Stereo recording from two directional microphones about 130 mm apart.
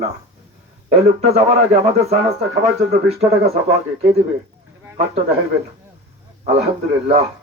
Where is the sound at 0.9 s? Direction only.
55° right (ahead or behind).